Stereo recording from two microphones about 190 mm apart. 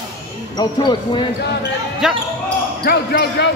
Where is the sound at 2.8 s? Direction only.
55° left (ahead or behind).